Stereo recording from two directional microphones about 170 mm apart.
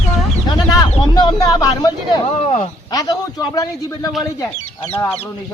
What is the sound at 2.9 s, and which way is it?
Speech, 20° left (ahead or behind).